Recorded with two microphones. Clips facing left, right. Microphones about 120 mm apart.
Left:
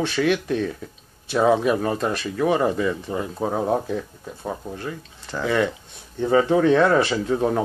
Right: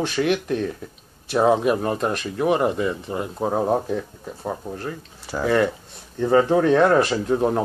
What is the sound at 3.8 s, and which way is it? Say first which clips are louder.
Speech: right 1 dB; 40° right (ahead or behind).